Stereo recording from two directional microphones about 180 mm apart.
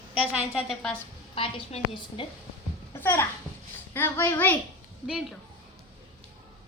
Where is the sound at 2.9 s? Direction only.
10° left (ahead or behind).